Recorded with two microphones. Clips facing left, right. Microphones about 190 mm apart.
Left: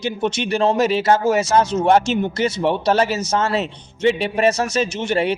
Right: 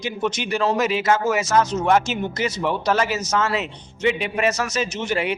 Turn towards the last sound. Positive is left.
turn(degrees=30)  # may be behind; listen again after turning